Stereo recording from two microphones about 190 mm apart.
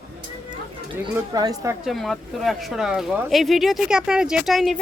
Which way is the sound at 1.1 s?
20° right (ahead or behind).